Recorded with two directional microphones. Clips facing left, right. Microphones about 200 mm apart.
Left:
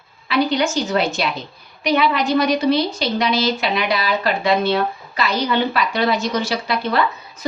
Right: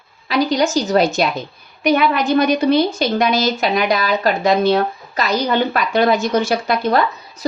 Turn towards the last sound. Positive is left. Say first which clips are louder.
# right 2 dB
turn(degrees=-45)  # may be behind; listen again after turning